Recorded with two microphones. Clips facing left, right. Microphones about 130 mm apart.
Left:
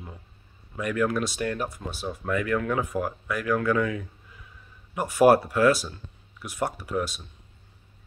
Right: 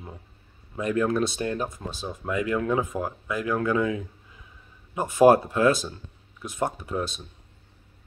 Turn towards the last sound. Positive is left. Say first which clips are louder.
# left 1 dB
turn(degrees=-25)  # may be behind; listen again after turning